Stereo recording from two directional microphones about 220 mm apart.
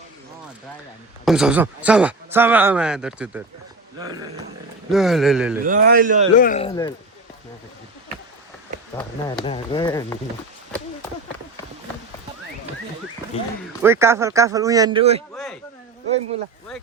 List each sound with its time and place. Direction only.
1.2 s speech: 5° right (ahead or behind)
4.9 s speech: centre (ahead or behind)
5.6 s speech: 40° right (ahead or behind)
6.3 s speech: 35° left (ahead or behind)
9.4 s speech: 20° left (ahead or behind)
13.3 s speech: 25° left (ahead or behind)
13.8 s speech: 10° right (ahead or behind)